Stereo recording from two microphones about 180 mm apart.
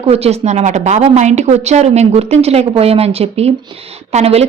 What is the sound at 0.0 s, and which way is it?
A woman's voice, 35° right (ahead or behind).